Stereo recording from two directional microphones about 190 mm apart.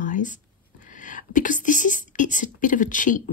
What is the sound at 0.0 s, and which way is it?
Speech, 40° left (ahead or behind).